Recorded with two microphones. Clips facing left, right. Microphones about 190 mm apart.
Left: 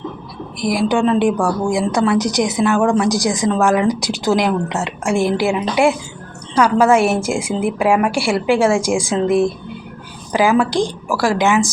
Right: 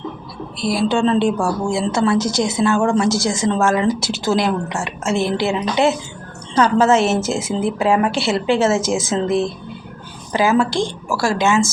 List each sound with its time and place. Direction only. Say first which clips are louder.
0.6 s a woman's voice: left 1 dB; 15° left (ahead or behind)